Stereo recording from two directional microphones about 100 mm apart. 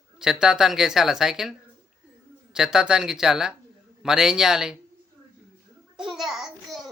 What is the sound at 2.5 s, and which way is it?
Speech, 5° right (ahead or behind).